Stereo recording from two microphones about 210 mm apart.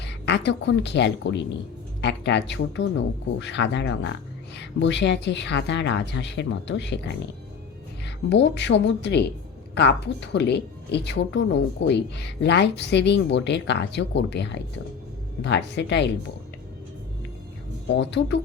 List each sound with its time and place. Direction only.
0.0 s a woman's voice: 55° left (ahead or behind)
8.0 s a woman's voice: 55° left (ahead or behind)
17.8 s a woman's voice: 55° left (ahead or behind)